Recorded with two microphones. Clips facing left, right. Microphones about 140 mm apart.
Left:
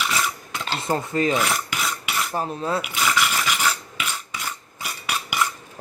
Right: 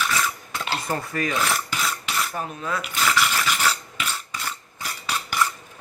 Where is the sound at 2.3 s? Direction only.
35° left (ahead or behind).